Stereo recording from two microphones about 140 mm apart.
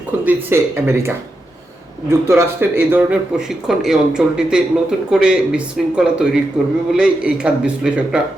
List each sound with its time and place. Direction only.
0.3 s a man's voice: 20° right (ahead or behind)